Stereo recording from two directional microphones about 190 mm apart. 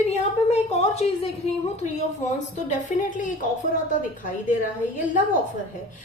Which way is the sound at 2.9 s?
40° left (ahead or behind).